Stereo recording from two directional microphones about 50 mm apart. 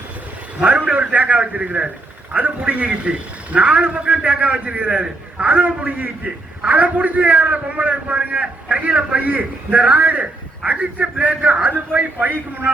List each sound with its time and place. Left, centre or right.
0.6 s a man's voice: right